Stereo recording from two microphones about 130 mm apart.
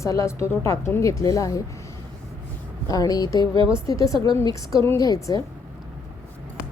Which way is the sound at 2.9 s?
30° left (ahead or behind).